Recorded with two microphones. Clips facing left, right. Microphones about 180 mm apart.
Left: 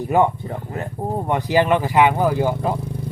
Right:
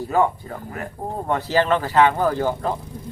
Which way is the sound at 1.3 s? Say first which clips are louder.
Left 2 dB; 15° left (ahead or behind).